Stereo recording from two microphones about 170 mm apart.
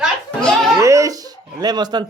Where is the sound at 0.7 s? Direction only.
20° right (ahead or behind).